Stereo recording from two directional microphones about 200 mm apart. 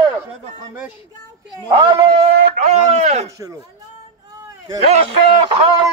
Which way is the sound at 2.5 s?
35° right (ahead or behind).